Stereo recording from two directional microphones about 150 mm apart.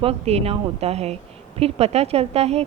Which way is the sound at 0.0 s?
40° right (ahead or behind).